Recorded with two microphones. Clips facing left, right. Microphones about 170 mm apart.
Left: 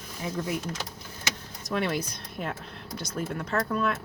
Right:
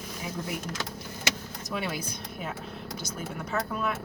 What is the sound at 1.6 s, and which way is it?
Speech, 5° right (ahead or behind).